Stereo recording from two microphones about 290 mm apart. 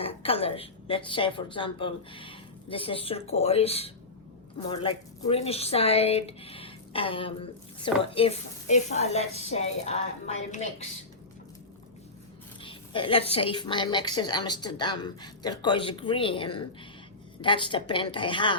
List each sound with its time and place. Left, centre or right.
0.0 s speech: centre
12.6 s a woman's voice: centre